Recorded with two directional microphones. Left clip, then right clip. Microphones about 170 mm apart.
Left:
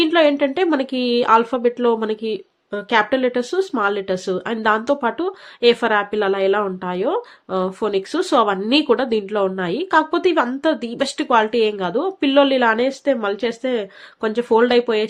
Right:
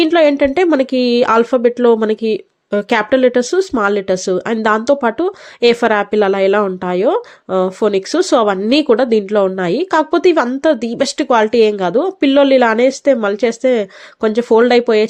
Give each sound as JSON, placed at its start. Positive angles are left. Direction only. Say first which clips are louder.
{"t": 0.0, "sound": "speech", "louder": "right 4 dB", "side_deg": -35}